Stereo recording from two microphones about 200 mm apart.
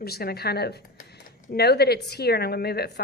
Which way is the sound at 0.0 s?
50° left (ahead or behind).